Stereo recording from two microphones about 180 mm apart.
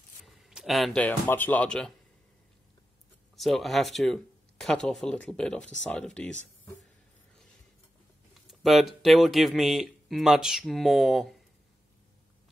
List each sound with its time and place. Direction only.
0.4 s speech: centre (ahead or behind)
3.3 s speech: centre (ahead or behind)
8.5 s speech: centre (ahead or behind)